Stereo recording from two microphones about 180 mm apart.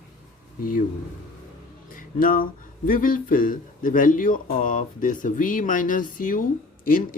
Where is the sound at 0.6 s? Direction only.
50° left (ahead or behind).